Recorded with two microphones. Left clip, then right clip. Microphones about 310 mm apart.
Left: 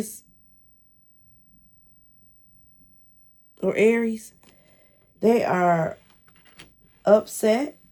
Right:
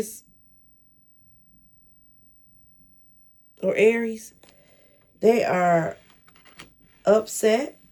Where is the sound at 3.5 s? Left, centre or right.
Centre.